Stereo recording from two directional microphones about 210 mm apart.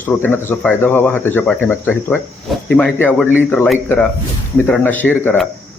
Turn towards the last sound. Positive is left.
turn(degrees=5)  # may be behind; listen again after turning